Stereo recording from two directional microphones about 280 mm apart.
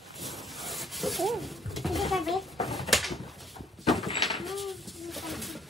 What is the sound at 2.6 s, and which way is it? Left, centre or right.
Door, centre.